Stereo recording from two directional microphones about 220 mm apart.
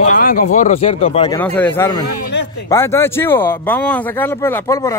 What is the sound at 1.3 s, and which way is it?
A man's voice, 10° left (ahead or behind).